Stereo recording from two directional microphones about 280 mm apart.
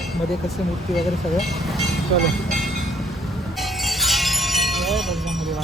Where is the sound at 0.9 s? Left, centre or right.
Centre.